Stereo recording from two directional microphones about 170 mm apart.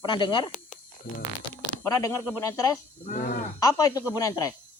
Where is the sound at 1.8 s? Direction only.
20° left (ahead or behind).